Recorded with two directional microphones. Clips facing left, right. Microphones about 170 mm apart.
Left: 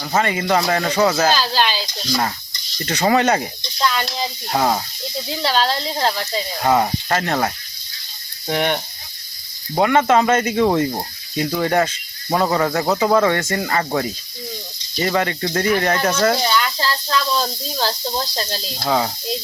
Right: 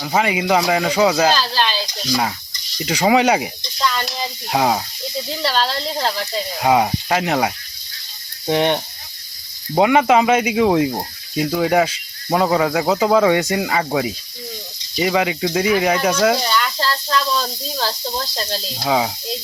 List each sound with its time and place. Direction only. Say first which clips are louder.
0.0 s speech: right 1 dB; 10° right (ahead or behind)
1.3 s speech: even; 5° left (ahead or behind)
2.0 s speech: right 2 dB; 10° right (ahead or behind)
3.8 s speech: left 1 dB; centre (ahead or behind)
8.4 s a sound: right 3 dB; 20° right (ahead or behind)
9.7 s speech: right 2 dB; 15° right (ahead or behind)
16.4 s speech: left 1 dB; 5° left (ahead or behind)